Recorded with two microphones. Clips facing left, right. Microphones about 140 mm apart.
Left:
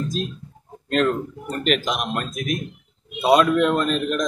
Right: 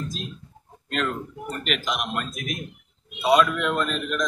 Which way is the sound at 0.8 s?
40° left (ahead or behind).